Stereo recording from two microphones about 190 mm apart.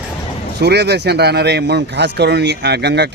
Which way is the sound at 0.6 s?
60° right (ahead or behind).